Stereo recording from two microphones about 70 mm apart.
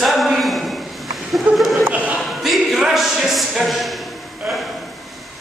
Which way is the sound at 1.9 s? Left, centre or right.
Right.